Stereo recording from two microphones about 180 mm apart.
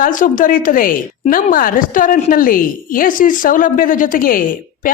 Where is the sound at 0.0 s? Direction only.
45° left (ahead or behind).